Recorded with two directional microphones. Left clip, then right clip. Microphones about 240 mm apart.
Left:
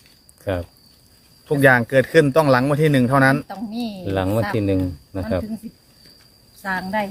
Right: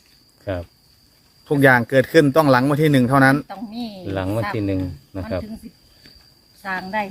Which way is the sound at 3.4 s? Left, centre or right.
Left.